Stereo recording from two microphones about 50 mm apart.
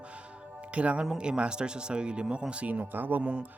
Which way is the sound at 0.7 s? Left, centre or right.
Right.